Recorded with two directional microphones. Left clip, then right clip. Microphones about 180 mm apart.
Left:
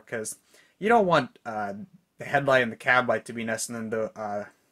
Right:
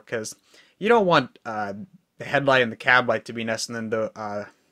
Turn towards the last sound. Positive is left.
turn(degrees=-30)  # may be behind; listen again after turning